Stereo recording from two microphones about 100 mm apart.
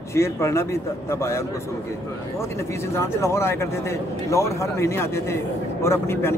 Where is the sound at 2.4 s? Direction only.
30° left (ahead or behind).